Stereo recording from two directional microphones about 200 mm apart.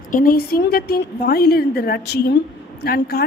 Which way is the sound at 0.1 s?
45° left (ahead or behind).